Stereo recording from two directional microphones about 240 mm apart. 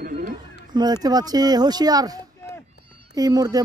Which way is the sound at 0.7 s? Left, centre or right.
Centre.